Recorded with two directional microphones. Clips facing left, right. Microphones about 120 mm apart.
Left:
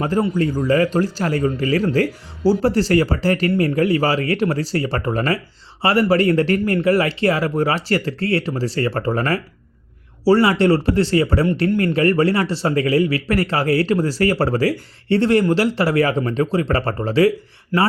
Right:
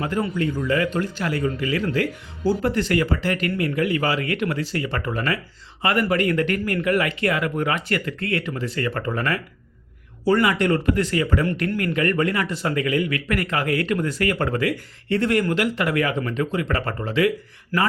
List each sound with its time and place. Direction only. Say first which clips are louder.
0.0 s speech: left 5 dB; 35° left (ahead or behind)
17.7 s speech: left 4 dB; 20° left (ahead or behind)